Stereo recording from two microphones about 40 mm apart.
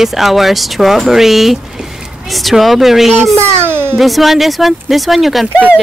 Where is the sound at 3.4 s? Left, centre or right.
Right.